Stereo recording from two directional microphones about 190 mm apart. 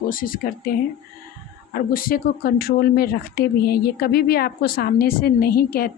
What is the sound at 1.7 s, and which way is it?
Speech, 50° left (ahead or behind).